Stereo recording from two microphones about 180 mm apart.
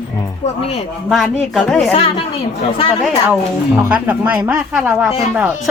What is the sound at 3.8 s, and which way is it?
A woman's voice, 5° right (ahead or behind).